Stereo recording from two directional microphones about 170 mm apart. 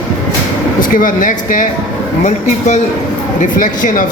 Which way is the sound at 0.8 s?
55° left (ahead or behind).